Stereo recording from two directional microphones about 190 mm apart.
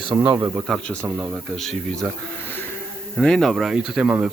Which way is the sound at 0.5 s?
Centre (ahead or behind).